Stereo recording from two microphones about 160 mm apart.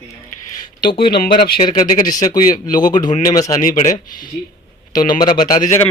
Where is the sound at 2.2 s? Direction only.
55° left (ahead or behind).